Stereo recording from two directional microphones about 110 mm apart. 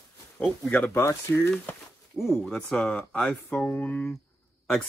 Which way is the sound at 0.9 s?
25° left (ahead or behind).